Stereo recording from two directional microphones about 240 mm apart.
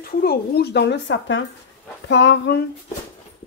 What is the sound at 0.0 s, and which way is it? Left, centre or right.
Speech, left.